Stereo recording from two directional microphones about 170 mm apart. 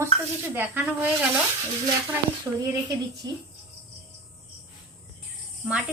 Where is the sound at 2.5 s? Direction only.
15° right (ahead or behind).